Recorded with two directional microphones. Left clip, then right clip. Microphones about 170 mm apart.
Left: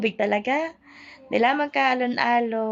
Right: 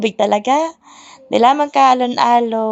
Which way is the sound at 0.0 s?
30° right (ahead or behind).